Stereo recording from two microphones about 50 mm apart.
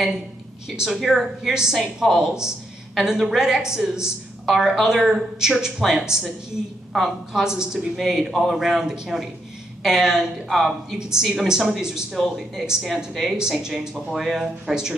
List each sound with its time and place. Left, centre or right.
0.7 s a man's voice: centre
7.4 s a man's voice: centre
10.5 s speech: centre
11.0 s a man's voice: centre